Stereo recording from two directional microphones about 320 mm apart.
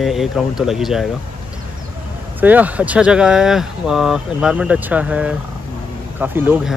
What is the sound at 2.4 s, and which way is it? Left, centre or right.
Speech, centre.